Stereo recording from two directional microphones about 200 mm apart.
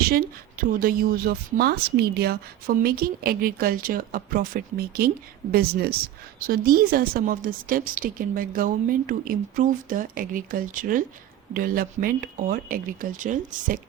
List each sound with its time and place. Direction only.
0.1 s a woman's voice: 45° right (ahead or behind)